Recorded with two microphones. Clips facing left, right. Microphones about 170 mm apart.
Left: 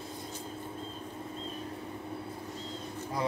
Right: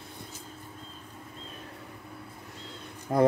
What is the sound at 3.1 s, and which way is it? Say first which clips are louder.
Speech: right 11 dB; 60° right (ahead or behind).